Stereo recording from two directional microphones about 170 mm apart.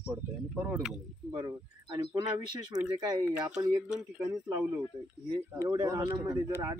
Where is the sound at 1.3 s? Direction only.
25° right (ahead or behind).